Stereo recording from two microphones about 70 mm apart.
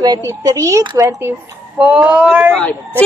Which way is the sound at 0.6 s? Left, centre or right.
Right.